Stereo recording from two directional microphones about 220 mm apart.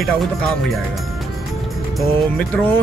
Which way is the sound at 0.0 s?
Centre (ahead or behind).